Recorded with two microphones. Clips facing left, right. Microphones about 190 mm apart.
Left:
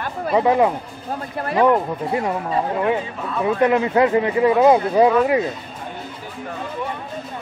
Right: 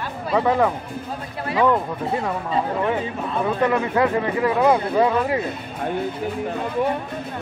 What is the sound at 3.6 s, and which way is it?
Speech, 20° left (ahead or behind).